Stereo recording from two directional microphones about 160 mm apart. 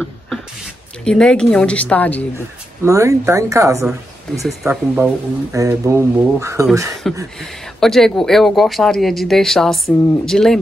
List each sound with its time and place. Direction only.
1.0 s speech: 5° left (ahead or behind)
2.3 s speech: 15° right (ahead or behind)
7.3 s speech: centre (ahead or behind)